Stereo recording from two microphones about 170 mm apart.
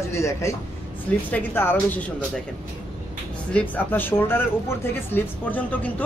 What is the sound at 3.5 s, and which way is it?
Speech, 10° left (ahead or behind).